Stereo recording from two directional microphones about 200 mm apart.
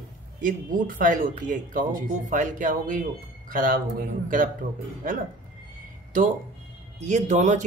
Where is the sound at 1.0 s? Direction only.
40° right (ahead or behind).